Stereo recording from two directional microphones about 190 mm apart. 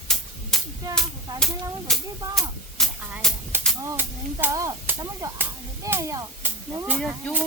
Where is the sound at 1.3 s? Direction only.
Centre (ahead or behind).